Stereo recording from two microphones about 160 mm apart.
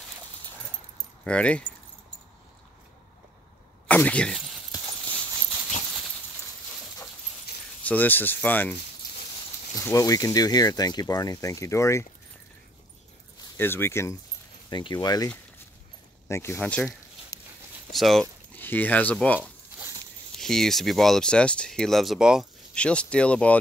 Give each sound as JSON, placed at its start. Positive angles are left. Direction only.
{"t": 1.2, "sound": "speech", "side_deg": 5}
{"t": 3.8, "sound": "speech", "side_deg": 10}
{"t": 7.5, "sound": "keys jangling", "side_deg": 90}
{"t": 7.8, "sound": "speech", "side_deg": 10}
{"t": 9.8, "sound": "speech", "side_deg": 20}
{"t": 13.6, "sound": "speech", "side_deg": 15}
{"t": 14.7, "sound": "speech", "side_deg": 25}
{"t": 16.3, "sound": "speech", "side_deg": 15}
{"t": 17.9, "sound": "speech", "side_deg": 0}
{"t": 18.6, "sound": "speech", "side_deg": 10}
{"t": 19.4, "sound": "zipper", "side_deg": -15}
{"t": 20.3, "sound": "speech", "side_deg": 0}